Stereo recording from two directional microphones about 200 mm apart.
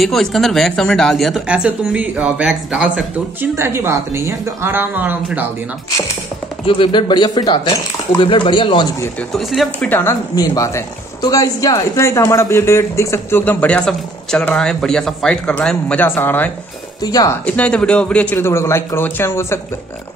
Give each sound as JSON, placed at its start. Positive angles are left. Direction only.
{"t": 0.0, "sound": "speech", "side_deg": 0}
{"t": 6.6, "sound": "speech", "side_deg": 25}
{"t": 9.3, "sound": "speech", "side_deg": 0}
{"t": 17.5, "sound": "speech", "side_deg": 5}